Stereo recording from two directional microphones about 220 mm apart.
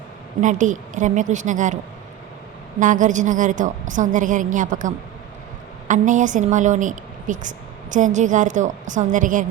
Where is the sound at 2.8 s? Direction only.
35° right (ahead or behind).